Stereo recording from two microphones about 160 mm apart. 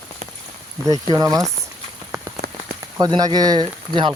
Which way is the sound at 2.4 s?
85° right.